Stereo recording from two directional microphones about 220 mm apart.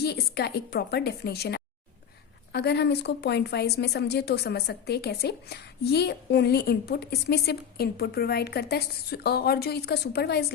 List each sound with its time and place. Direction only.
0.0 s a woman's voice: 45° left (ahead or behind)